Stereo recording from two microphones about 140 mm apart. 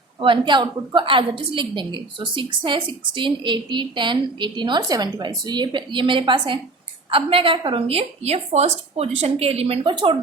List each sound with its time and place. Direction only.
0.2 s a woman's voice: 35° right (ahead or behind)